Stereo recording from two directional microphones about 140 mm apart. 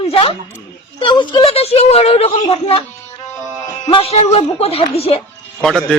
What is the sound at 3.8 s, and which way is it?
Speech, 40° left (ahead or behind).